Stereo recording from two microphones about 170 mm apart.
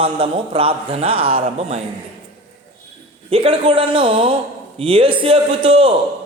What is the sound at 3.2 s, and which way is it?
Speech, 35° right (ahead or behind).